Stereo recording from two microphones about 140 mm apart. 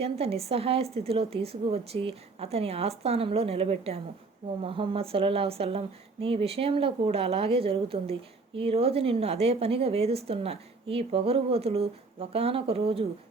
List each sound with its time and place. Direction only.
0.0 s a woman's voice: 45° right (ahead or behind)